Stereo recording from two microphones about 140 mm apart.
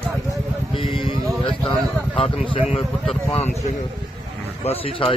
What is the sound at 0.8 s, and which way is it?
Music, 40° left (ahead or behind).